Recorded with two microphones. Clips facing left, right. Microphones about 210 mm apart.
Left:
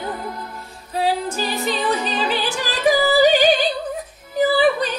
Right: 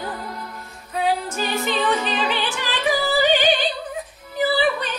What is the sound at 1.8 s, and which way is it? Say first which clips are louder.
Music: even; 10° left (ahead or behind).